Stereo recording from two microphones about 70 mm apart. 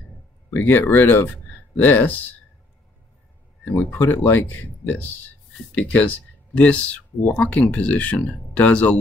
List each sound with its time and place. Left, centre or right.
0.5 s speech: left
3.9 s speech: left